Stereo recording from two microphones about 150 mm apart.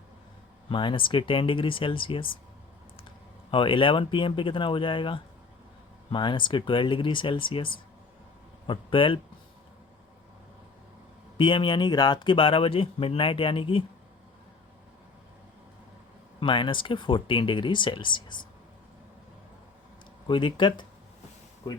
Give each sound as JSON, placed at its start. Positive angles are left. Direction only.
{"t": 0.7, "sound": "speech", "side_deg": 35}
{"t": 3.5, "sound": "speech", "side_deg": 35}
{"t": 11.3, "sound": "speech", "side_deg": 35}
{"t": 16.4, "sound": "speech", "side_deg": 35}
{"t": 20.2, "sound": "speech", "side_deg": 35}